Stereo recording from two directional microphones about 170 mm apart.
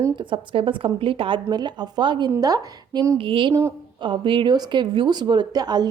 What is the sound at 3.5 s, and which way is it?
Speech, 15° right (ahead or behind).